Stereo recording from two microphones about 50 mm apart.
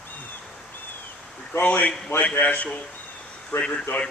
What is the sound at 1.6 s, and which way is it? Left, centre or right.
Speech, left.